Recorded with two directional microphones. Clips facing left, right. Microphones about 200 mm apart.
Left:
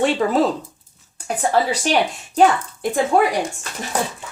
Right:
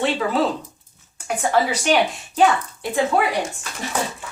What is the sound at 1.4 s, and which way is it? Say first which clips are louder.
Speech: left 1 dB; 40° left (ahead or behind).